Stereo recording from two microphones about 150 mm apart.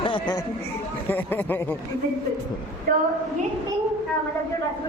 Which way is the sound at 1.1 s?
10° left (ahead or behind).